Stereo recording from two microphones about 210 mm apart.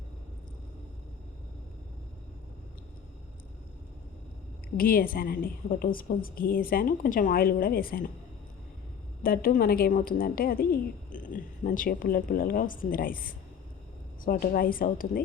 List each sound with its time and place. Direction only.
4.8 s a woman's voice: 45° left (ahead or behind)
9.2 s a woman's voice: 45° left (ahead or behind)